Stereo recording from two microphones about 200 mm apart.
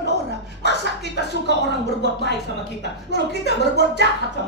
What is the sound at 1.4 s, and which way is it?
A woman's voice, 60° left (ahead or behind).